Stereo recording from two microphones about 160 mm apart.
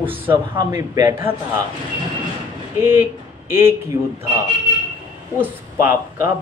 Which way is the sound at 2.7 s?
15° right (ahead or behind).